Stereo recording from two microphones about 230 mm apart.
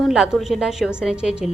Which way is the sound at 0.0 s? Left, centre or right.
Centre.